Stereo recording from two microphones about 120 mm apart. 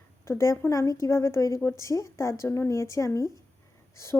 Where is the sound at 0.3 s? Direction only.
25° left (ahead or behind).